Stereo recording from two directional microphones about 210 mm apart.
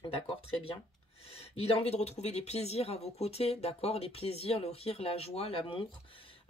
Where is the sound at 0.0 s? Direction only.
25° left (ahead or behind).